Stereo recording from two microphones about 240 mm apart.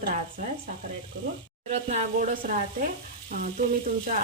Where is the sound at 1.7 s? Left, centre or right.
Right.